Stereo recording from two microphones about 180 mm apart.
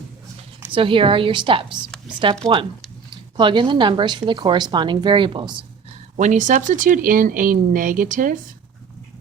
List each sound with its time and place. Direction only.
0.7 s speech: 30° right (ahead or behind)
6.1 s speech: 40° right (ahead or behind)